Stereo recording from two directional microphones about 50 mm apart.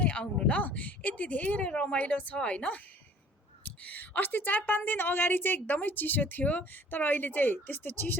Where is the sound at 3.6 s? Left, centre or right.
Left.